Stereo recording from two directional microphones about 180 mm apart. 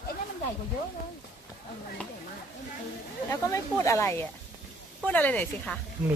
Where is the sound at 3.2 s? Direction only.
15° left (ahead or behind).